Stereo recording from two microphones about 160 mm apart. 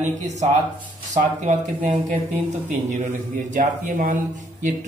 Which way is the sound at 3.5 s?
55° right (ahead or behind).